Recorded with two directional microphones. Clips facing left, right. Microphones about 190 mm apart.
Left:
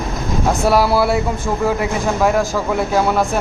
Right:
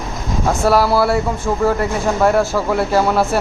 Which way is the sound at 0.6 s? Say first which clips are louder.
Right 1 dB; 15° left (ahead or behind).